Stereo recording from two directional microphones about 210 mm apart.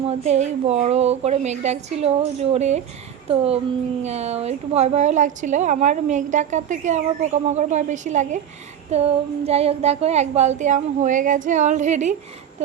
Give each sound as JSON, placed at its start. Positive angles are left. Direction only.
{"t": 0.1, "sound": "a woman's voice", "side_deg": -35}